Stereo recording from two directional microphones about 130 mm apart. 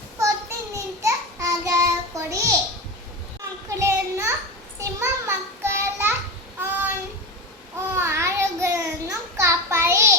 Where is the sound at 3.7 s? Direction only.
20° right (ahead or behind).